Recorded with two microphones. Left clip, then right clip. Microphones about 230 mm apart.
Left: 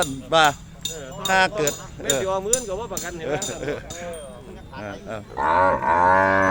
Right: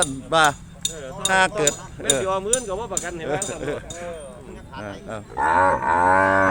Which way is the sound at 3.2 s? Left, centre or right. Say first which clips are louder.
Left 1 dB; centre.